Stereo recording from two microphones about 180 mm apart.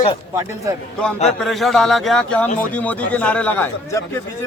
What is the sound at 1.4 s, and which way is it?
A man's voice, centre (ahead or behind).